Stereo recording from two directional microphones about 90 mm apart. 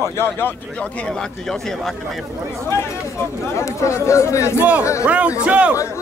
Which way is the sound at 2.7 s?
30° left (ahead or behind).